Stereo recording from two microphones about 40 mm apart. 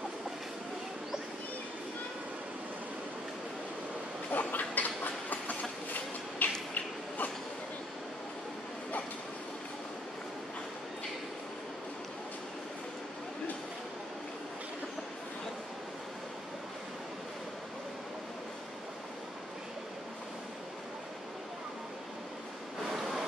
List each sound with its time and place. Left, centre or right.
4.3 s train: left
6.4 s a sound: left
22.8 s waves: centre